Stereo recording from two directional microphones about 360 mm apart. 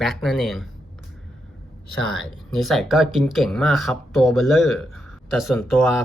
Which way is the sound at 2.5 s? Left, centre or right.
Centre.